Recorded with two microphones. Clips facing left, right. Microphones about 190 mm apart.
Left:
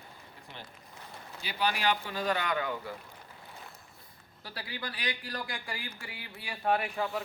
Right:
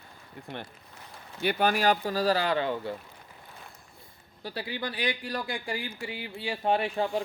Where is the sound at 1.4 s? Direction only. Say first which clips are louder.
Right 7 dB; 55° right (ahead or behind); by 2.9 s 30° right (ahead or behind).